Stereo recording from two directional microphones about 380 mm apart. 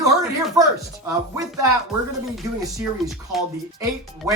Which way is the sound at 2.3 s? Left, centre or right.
Centre.